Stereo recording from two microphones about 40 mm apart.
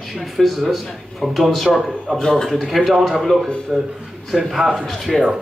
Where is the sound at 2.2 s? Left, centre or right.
Centre.